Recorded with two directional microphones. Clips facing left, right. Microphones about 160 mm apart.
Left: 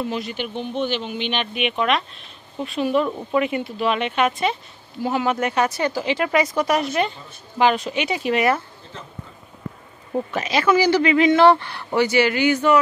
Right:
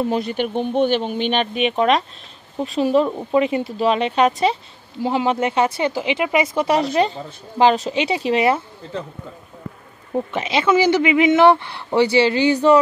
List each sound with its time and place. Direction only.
0.0 s speech: 45° right (ahead or behind)
3.1 s speech: 25° right (ahead or behind)
5.0 s speech: 25° right (ahead or behind)
10.3 s speech: 25° right (ahead or behind)